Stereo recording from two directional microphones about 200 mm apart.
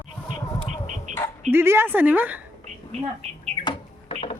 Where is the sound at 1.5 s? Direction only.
10° right (ahead or behind).